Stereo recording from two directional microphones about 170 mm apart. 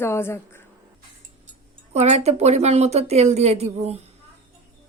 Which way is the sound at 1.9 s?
40° right (ahead or behind).